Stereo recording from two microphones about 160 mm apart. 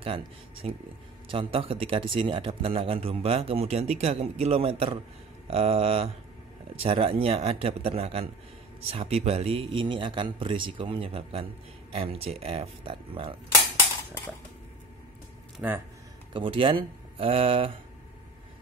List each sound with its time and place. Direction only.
0.0 s a man's voice: 35° right (ahead or behind)
15.6 s speech: 10° right (ahead or behind)
16.3 s a man's voice: 30° right (ahead or behind)